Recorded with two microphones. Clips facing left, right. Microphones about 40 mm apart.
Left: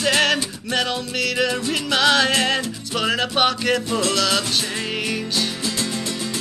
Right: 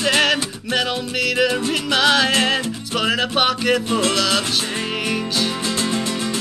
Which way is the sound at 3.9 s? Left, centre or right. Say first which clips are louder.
Right 2 dB; right.